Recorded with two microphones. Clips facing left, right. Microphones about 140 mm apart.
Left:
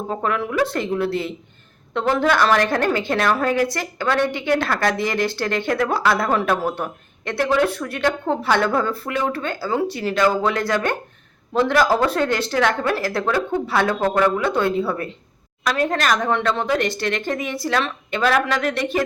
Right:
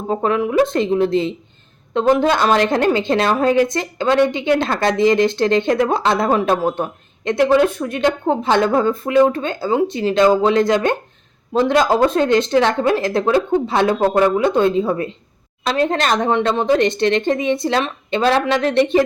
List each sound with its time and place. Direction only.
0.1 s a woman's voice: 20° right (ahead or behind)